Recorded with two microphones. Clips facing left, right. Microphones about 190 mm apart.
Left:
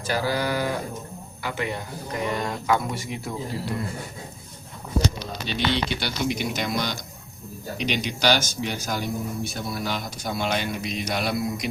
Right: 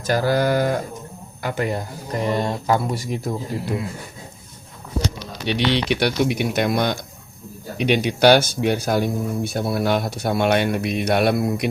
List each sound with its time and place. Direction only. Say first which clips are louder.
0.1 s speech: right 6 dB; 50° right (ahead or behind)
5.5 s speech: right 6 dB; 70° right (ahead or behind)